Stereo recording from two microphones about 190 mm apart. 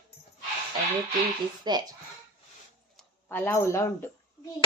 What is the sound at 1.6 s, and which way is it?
Speech, 20° right (ahead or behind).